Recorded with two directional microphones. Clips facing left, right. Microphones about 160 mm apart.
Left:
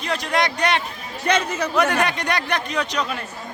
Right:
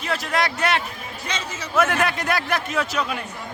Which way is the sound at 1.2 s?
60° left (ahead or behind).